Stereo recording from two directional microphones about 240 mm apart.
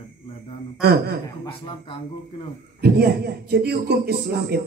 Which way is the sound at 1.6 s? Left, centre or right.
Left.